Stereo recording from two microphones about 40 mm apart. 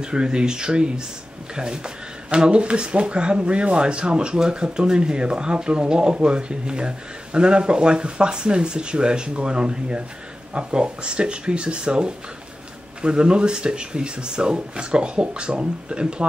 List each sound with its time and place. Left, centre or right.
0.0 s speech: right